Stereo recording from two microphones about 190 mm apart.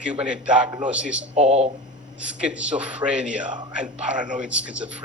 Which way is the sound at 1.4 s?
35° right (ahead or behind).